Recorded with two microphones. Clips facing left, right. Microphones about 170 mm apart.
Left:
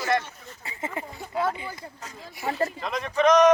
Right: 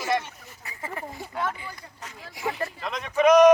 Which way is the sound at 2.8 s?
Centre (ahead or behind).